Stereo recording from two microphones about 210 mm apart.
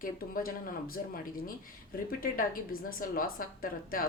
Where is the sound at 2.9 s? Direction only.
45° left (ahead or behind).